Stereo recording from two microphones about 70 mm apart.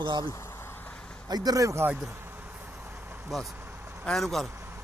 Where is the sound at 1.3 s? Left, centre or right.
Right.